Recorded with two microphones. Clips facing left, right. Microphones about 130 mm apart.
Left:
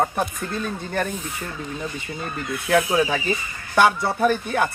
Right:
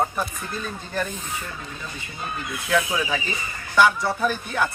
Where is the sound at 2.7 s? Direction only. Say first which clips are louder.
Left 4 dB; 40° left (ahead or behind).